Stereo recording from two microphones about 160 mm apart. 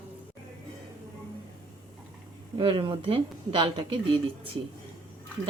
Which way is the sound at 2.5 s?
35° right (ahead or behind).